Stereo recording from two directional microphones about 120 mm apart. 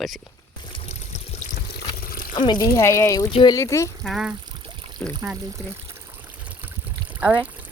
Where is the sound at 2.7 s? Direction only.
25° left (ahead or behind).